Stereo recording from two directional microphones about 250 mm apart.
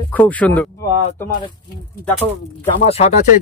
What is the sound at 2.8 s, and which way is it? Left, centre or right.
Speech, left.